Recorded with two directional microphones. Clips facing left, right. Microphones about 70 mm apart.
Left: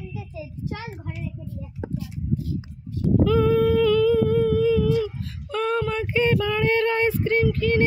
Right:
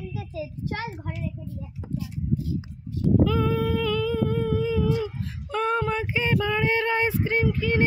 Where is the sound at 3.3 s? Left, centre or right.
Centre.